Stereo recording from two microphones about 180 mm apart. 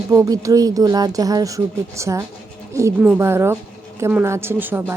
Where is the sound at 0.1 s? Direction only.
20° right (ahead or behind).